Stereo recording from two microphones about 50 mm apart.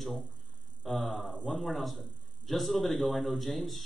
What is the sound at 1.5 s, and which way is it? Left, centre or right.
A man's voice, centre.